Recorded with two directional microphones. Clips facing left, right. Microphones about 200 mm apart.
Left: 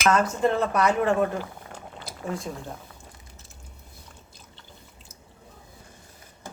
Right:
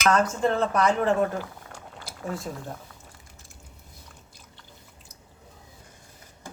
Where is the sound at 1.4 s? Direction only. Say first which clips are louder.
Left 1 dB; 20° left (ahead or behind).